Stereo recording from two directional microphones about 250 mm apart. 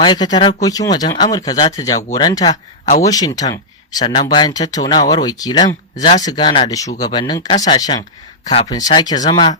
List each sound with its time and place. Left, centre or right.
0.0 s speech: centre